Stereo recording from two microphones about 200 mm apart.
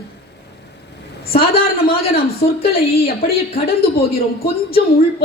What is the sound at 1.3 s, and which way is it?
Speech, 50° left (ahead or behind).